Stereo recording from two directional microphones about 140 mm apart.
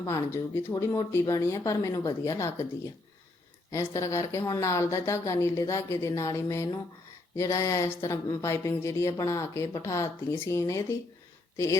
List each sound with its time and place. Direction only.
0.0 s speech: 25° left (ahead or behind)
3.7 s speech: 20° left (ahead or behind)